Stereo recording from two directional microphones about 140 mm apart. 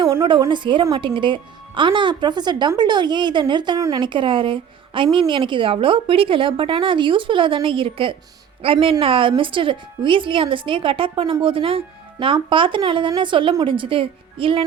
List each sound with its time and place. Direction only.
0.2 s speech: 35° right (ahead or behind)
4.0 s speech: 35° right (ahead or behind)